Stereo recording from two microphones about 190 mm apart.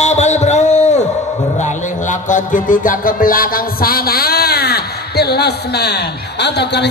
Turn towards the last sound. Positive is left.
turn(degrees=60)  # may be behind; listen again after turning